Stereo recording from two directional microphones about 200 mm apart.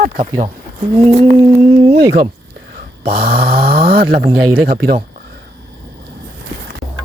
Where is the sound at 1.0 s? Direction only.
30° right (ahead or behind).